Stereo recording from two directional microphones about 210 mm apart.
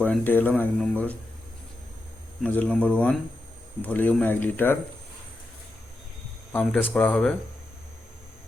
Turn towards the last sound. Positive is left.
turn(degrees=5)  # may be behind; listen again after turning